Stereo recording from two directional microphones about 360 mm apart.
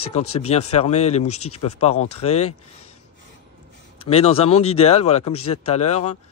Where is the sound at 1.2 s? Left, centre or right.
Left.